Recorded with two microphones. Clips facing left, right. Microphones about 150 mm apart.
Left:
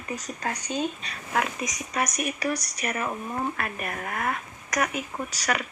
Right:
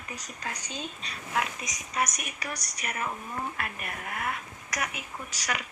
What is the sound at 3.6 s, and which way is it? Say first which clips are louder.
Speech: left 5 dB; 50° left (ahead or behind).